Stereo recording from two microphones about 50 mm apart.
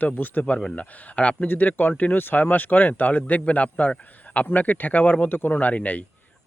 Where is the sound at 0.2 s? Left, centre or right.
Left.